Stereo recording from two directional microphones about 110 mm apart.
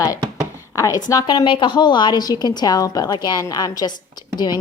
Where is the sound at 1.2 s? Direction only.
50° left (ahead or behind).